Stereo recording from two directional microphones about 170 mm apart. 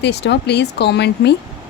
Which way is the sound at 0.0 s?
85° left.